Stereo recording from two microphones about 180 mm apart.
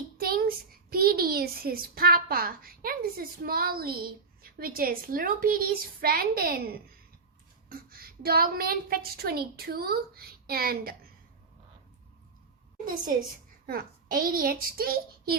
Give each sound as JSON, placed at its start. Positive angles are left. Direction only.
{"t": 0.2, "sound": "a child's voice", "side_deg": -55}
{"t": 13.7, "sound": "a woman's voice", "side_deg": -55}